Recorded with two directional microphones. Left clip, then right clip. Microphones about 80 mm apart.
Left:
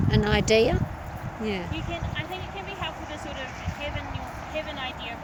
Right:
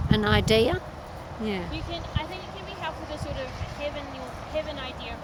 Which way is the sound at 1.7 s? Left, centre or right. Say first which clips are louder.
Left 1 dB; right.